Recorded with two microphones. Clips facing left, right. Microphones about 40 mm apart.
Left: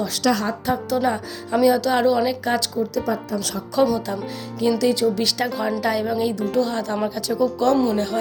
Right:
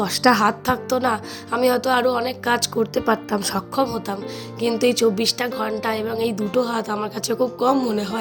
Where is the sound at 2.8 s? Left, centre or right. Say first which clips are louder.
Right 3 dB; right.